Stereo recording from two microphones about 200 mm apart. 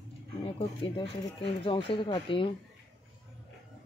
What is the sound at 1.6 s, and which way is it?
Speech, 25° left (ahead or behind).